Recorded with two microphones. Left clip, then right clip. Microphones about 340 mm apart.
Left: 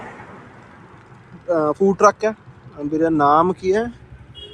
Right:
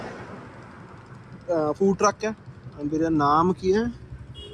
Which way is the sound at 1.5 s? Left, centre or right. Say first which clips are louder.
Left 5 dB; left.